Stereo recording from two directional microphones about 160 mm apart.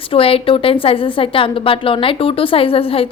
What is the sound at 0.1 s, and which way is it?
A woman's voice, 35° left (ahead or behind).